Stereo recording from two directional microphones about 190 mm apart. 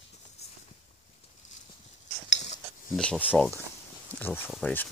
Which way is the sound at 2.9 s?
5° left (ahead or behind).